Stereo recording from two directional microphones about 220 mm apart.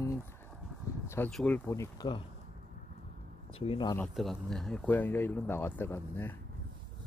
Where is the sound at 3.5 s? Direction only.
25° left (ahead or behind).